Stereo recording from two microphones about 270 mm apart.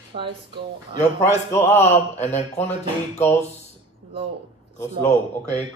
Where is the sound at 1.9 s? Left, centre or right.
Left.